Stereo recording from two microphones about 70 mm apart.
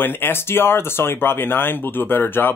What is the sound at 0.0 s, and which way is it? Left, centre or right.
Speech, left.